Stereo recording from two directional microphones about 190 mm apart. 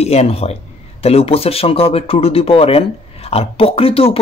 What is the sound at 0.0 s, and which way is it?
Speech, 35° left (ahead or behind).